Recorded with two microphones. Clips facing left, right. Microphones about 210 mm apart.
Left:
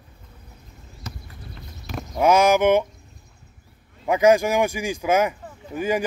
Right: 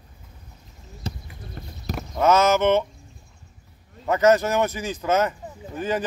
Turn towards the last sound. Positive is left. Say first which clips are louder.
# left 2 dB
turn(degrees=10)  # may be behind; listen again after turning